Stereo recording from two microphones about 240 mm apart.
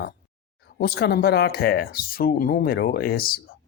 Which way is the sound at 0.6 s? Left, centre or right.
Left.